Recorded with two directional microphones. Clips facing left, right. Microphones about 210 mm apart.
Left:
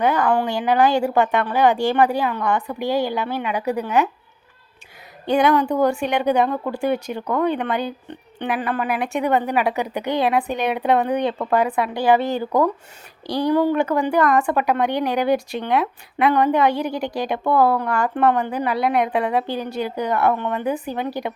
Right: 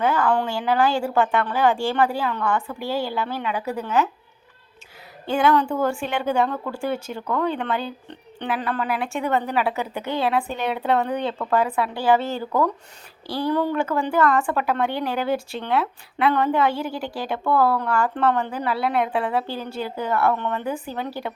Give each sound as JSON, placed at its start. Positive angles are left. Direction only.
{"t": 0.0, "sound": "a woman's voice", "side_deg": 20}
{"t": 5.2, "sound": "a woman's voice", "side_deg": 20}